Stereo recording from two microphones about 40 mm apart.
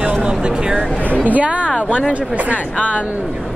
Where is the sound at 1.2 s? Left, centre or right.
Right.